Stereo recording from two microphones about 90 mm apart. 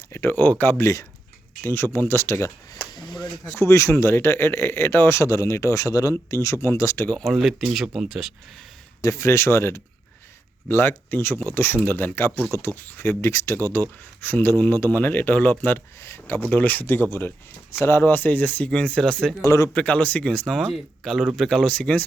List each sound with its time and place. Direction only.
0.1 s speech: 25° left (ahead or behind)
2.1 s speech: 35° left (ahead or behind)
2.9 s a sound: 55° left (ahead or behind)
3.6 s speech: 30° left (ahead or behind)
7.2 s speech: centre (ahead or behind)
9.0 s speech: 35° left (ahead or behind); by 19.3 s 5° left (ahead or behind)
19.5 s speech: 35° left (ahead or behind)
19.7 s speech: 15° left (ahead or behind)